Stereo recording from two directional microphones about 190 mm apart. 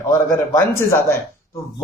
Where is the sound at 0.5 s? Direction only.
15° left (ahead or behind).